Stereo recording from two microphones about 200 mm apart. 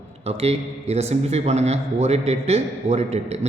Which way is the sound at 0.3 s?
30° right (ahead or behind).